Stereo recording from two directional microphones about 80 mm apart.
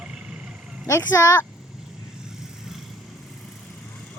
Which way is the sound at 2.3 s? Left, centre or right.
Centre.